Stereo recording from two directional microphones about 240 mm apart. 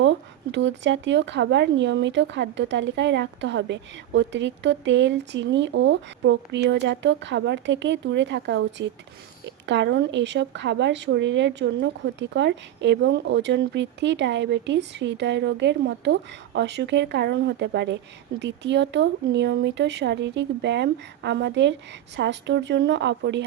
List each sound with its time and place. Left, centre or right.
0.5 s speech: right